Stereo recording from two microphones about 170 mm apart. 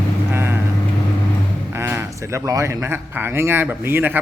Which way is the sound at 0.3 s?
15° right (ahead or behind).